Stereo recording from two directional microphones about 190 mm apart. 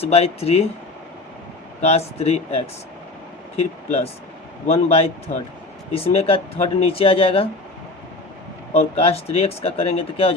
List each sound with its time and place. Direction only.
0.0 s speech: 30° left (ahead or behind)
1.8 s speech: 35° left (ahead or behind)
8.7 s speech: 35° left (ahead or behind)